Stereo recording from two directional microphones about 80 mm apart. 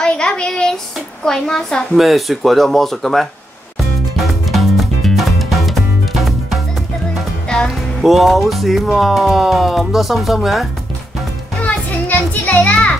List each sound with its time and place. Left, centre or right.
0.0 s a sound: centre
2.0 s speech: centre
4.2 s music: centre
7.4 s music: centre
8.0 s speech: centre
11.6 s children playing: left